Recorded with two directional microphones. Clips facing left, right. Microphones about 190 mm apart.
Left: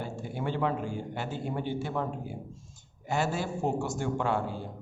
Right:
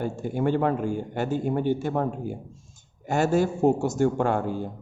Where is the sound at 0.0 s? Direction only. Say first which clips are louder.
Right 8 dB; 50° right (ahead or behind).